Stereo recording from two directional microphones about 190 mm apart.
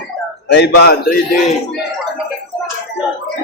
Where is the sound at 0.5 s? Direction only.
60° left (ahead or behind).